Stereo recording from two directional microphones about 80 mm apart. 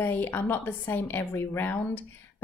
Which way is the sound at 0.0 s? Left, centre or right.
Left.